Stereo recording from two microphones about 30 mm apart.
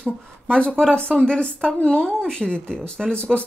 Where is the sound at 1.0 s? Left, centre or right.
Left.